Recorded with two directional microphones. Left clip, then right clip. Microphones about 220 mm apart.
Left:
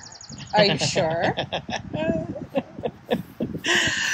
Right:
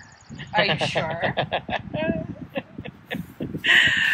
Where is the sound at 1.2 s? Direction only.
10° left (ahead or behind).